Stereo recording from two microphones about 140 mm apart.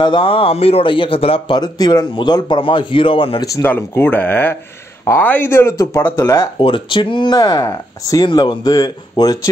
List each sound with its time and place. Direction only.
0.0 s speech: 35° left (ahead or behind)
3.5 s speech: 15° left (ahead or behind)
6.6 s speech: 35° left (ahead or behind)